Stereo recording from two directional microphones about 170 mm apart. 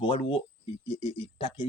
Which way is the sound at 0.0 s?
35° left (ahead or behind).